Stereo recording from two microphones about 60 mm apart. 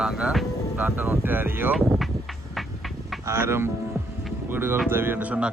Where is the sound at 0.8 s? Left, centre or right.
Right.